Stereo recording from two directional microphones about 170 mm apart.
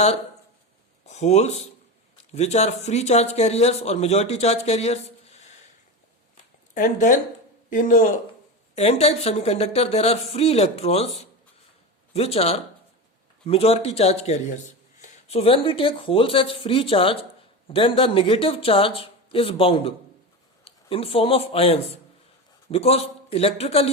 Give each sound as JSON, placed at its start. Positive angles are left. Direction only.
{"t": 1.0, "sound": "speech", "side_deg": 40}
{"t": 6.7, "sound": "speech", "side_deg": 50}
{"t": 8.7, "sound": "speech", "side_deg": 40}